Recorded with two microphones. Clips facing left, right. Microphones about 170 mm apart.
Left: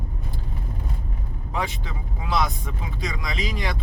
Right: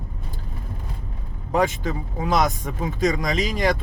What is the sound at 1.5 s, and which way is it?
Speech, 45° right (ahead or behind).